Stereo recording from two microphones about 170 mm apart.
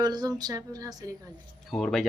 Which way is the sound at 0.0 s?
20° right (ahead or behind).